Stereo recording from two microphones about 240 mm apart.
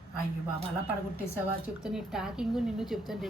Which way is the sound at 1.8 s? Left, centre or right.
Centre.